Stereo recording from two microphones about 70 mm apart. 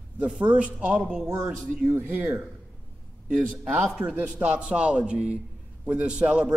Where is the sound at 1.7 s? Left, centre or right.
Right.